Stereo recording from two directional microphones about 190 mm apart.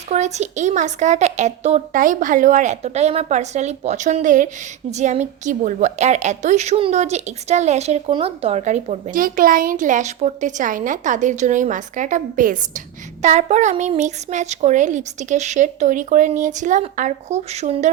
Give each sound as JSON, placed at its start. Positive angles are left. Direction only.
{"t": 0.1, "sound": "a woman's voice", "side_deg": -35}